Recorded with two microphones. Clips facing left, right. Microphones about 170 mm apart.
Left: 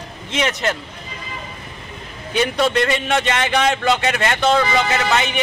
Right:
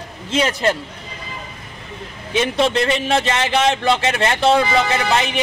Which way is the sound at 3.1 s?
30° right (ahead or behind).